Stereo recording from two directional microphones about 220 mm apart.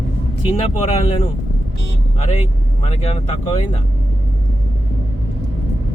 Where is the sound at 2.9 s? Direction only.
25° left (ahead or behind).